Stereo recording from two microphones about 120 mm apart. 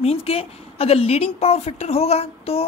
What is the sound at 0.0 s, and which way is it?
A woman's voice, 60° left (ahead or behind).